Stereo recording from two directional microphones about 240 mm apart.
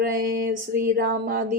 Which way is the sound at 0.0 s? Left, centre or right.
Right.